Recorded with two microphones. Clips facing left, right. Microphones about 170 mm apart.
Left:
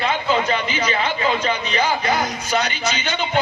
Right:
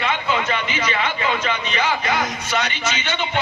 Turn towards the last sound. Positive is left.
turn(degrees=35)  # may be behind; listen again after turning